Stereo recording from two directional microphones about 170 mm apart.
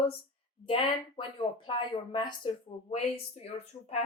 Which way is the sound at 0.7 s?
30° left (ahead or behind).